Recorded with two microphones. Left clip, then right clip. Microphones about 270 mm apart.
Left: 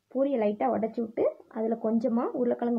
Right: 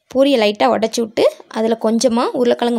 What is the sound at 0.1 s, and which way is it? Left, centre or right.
Speech, right.